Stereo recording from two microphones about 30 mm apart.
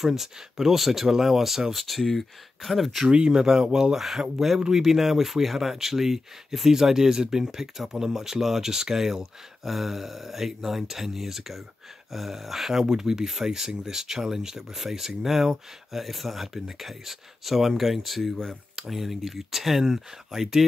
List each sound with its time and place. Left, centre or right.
0.0 s speech: centre
1.7 s speech: centre
3.1 s speech: right
3.9 s speech: centre
4.8 s speech: centre
12.8 s speech: right